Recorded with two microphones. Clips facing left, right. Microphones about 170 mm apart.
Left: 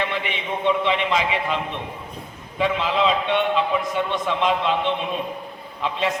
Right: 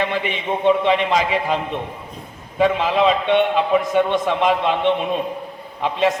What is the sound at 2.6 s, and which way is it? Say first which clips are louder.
A man's voice: right 4 dB; 50° right (ahead or behind).